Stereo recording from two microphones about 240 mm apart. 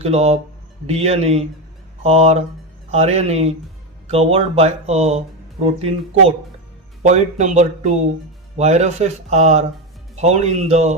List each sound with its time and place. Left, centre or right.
0.0 s speech: right